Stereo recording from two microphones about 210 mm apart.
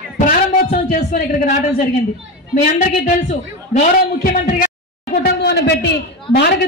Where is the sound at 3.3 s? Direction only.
35° left (ahead or behind).